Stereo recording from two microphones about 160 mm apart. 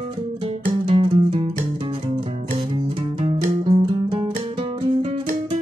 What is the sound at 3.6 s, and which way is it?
Music, 35° right (ahead or behind).